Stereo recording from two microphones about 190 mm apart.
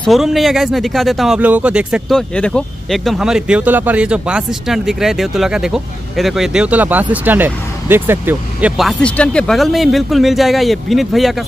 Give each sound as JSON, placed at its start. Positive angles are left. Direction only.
{"t": 0.0, "sound": "speech", "side_deg": 0}